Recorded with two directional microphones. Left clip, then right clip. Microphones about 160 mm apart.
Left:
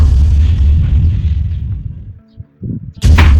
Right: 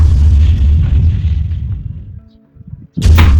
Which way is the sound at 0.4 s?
Centre (ahead or behind).